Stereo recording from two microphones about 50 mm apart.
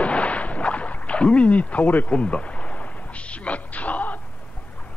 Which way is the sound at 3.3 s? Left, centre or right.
Left.